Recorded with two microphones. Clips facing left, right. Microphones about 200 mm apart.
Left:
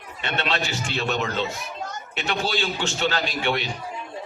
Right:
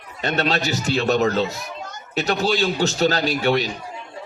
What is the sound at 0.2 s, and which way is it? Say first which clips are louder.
A man's voice: right 5 dB; 40° right (ahead or behind).